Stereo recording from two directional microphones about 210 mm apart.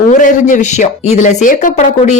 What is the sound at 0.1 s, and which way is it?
Speech, 35° left (ahead or behind).